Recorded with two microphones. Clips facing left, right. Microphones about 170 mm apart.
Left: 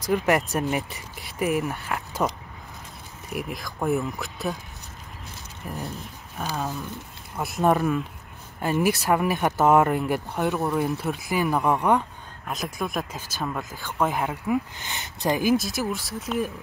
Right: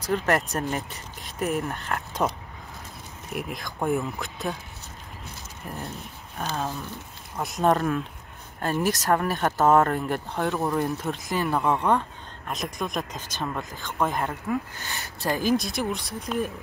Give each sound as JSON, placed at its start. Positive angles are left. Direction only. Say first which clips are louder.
{"t": 0.0, "sound": "speech", "louder": "left 2 dB", "side_deg": 10}
{"t": 3.3, "sound": "speech", "louder": "even", "side_deg": 0}
{"t": 5.6, "sound": "speech", "louder": "left 2 dB", "side_deg": 10}
{"t": 12.4, "sound": "speech", "louder": "left 1 dB", "side_deg": 0}
{"t": 14.8, "sound": "speech", "louder": "left 2 dB", "side_deg": 20}
{"t": 15.5, "sound": "speech", "louder": "left 1 dB", "side_deg": 5}